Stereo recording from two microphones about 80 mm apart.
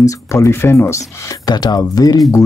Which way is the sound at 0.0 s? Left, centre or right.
Left.